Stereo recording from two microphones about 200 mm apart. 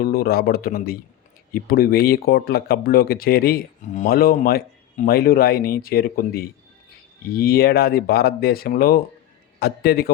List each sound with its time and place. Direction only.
0.0 s speech: 50° left (ahead or behind)